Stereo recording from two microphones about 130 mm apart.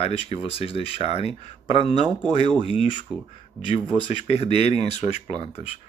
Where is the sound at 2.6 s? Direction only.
45° left (ahead or behind).